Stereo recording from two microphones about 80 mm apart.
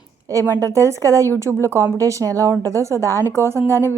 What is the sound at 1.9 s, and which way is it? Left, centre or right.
Speech, right.